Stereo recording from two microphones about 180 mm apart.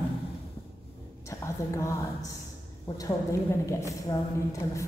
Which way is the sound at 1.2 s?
15° left (ahead or behind).